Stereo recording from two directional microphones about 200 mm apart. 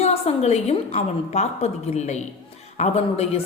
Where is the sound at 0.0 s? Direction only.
30° left (ahead or behind).